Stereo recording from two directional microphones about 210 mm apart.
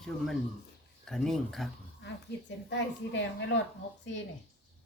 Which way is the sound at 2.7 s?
55° left (ahead or behind).